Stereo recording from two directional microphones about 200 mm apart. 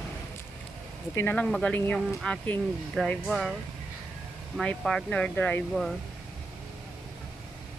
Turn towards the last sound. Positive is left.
turn(degrees=5)  # may be behind; listen again after turning